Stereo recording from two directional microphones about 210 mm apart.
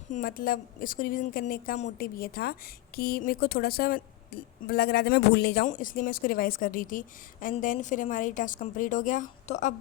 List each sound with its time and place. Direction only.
0.1 s a woman's voice: 40° left (ahead or behind)